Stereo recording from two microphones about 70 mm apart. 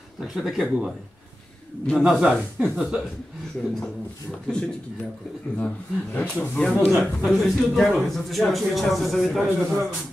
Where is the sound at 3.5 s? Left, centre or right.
Centre; by 6.6 s left.